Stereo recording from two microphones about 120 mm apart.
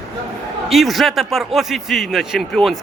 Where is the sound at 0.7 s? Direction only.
Centre (ahead or behind).